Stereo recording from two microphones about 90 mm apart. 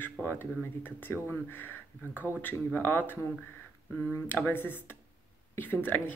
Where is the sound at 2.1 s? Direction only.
15° right (ahead or behind).